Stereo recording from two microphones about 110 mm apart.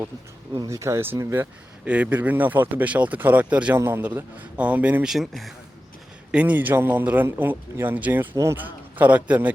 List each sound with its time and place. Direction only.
0.7 s speech: 25° right (ahead or behind)
1.8 s a man's voice: 10° right (ahead or behind)
5.1 s a man's voice: centre (ahead or behind)
6.3 s a man's voice: 15° right (ahead or behind)